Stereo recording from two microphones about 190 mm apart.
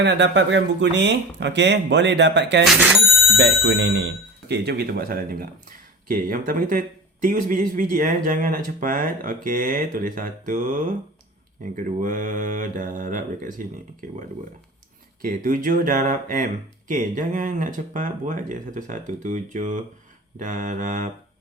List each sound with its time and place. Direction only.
0.0 s speech: 70° right (ahead or behind)
2.6 s speech: 5° right (ahead or behind)
3.3 s speech: 60° right (ahead or behind); by 14.2 s 40° right (ahead or behind)
15.2 s speech: 45° right (ahead or behind)